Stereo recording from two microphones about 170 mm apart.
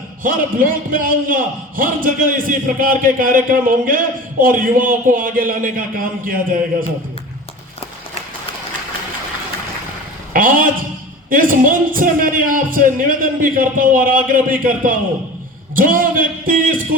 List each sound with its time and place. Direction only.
0.2 s a man's voice: 55° right (ahead or behind)
10.3 s a sound: 55° right (ahead or behind)
11.3 s a man's voice: 55° right (ahead or behind)